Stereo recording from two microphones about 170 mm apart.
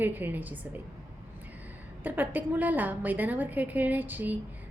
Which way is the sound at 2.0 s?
10° right (ahead or behind).